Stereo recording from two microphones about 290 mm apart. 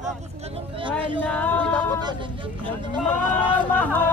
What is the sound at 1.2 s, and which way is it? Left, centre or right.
Speech, centre.